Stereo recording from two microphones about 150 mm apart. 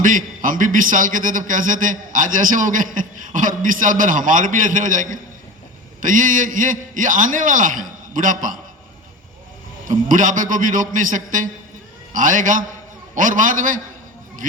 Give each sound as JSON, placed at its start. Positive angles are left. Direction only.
{"t": 0.0, "sound": "a man's voice", "side_deg": -65}
{"t": 9.8, "sound": "a man's voice", "side_deg": -60}